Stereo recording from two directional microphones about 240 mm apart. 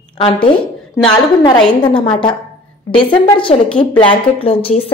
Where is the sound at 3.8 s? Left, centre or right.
Left.